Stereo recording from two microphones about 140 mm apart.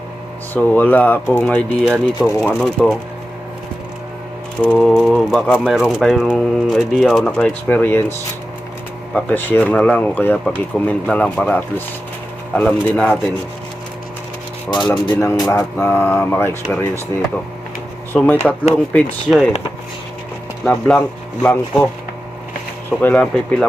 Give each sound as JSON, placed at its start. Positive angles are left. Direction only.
{"t": 0.5, "sound": "speech", "side_deg": 15}
{"t": 4.6, "sound": "speech", "side_deg": 5}
{"t": 9.1, "sound": "speech", "side_deg": 10}
{"t": 14.7, "sound": "speech", "side_deg": 35}
{"t": 15.2, "sound": "speech", "side_deg": 20}
{"t": 18.1, "sound": "speech", "side_deg": 15}
{"t": 20.7, "sound": "speech", "side_deg": 5}
{"t": 22.9, "sound": "speech", "side_deg": 10}